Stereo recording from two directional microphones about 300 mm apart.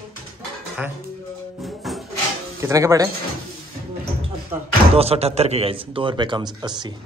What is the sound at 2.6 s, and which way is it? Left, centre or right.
Speech, centre.